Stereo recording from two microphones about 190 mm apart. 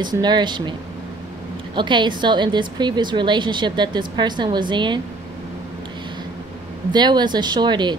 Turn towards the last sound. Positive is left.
turn(degrees=-25)  # may be behind; listen again after turning